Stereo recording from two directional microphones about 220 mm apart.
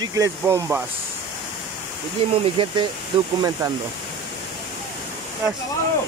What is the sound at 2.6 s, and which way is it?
Speech, 20° right (ahead or behind).